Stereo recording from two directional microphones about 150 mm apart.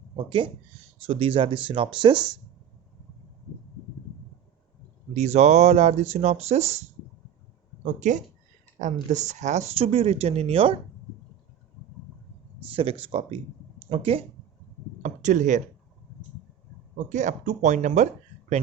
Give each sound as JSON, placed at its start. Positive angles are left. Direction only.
{"t": 0.3, "sound": "speech", "side_deg": -35}
{"t": 5.1, "sound": "speech", "side_deg": -50}
{"t": 8.0, "sound": "speech", "side_deg": -55}
{"t": 12.7, "sound": "speech", "side_deg": -35}
{"t": 15.0, "sound": "speech", "side_deg": -55}
{"t": 17.1, "sound": "speech", "side_deg": -55}